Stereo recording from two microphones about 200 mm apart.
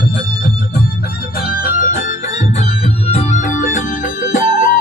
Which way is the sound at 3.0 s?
35° left (ahead or behind).